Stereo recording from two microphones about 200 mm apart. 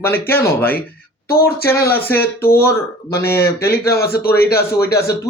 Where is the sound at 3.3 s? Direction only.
15° left (ahead or behind).